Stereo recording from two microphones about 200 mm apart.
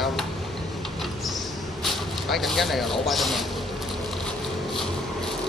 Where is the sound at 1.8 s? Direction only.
Centre (ahead or behind).